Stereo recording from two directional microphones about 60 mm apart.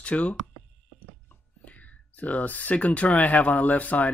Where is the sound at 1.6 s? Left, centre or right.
Left.